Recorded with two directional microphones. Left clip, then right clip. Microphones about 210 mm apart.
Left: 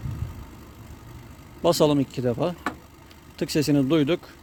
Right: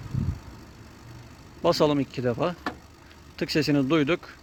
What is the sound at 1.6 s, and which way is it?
Speech, 20° left (ahead or behind).